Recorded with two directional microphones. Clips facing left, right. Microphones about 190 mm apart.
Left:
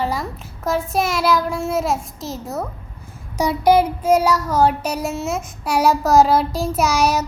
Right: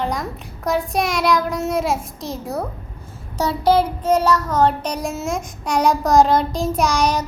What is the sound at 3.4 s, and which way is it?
Child singing, 10° left (ahead or behind).